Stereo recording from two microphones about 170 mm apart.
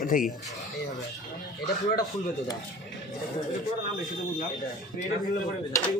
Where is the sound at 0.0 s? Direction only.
55° left (ahead or behind).